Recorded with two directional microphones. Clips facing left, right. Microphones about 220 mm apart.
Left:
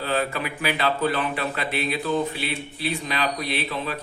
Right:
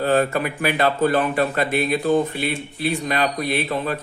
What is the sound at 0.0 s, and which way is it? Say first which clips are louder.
A man's voice: right 7 dB; 50° right (ahead or behind).